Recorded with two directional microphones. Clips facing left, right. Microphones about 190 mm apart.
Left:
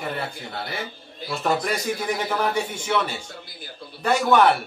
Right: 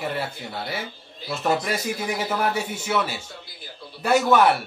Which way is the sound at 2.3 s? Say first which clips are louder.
Left 1 dB; 5° right (ahead or behind).